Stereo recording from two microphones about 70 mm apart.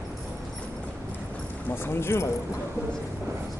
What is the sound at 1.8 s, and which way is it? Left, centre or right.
Speech, left.